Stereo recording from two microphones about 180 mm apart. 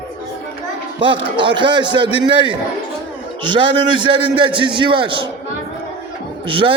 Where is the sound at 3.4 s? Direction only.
25° right (ahead or behind).